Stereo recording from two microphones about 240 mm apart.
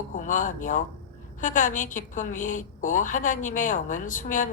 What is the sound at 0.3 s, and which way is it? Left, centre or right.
A woman's voice, left.